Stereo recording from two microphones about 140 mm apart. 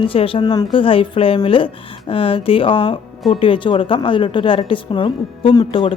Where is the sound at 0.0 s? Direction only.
40° left (ahead or behind).